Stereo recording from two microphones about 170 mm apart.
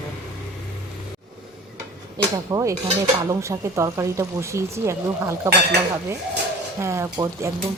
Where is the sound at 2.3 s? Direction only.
20° right (ahead or behind).